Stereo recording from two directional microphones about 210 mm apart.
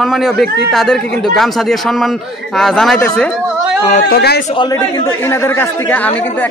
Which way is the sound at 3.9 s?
45° left (ahead or behind).